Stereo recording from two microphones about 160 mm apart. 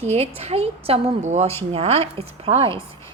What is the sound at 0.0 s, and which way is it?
A woman's voice, 40° right (ahead or behind).